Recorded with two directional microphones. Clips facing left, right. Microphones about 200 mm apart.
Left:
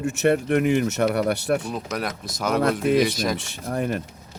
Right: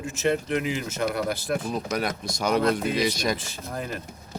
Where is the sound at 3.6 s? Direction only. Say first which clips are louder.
Left 8 dB; 55° left (ahead or behind).